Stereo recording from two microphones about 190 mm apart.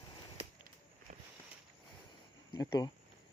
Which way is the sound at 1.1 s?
45° right (ahead or behind).